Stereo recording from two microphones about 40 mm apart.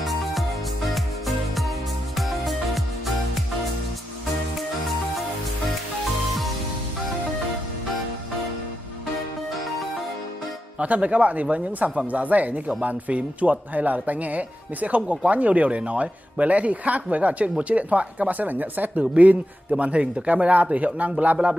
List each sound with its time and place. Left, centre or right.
0.0 s music: centre
10.8 s speech: right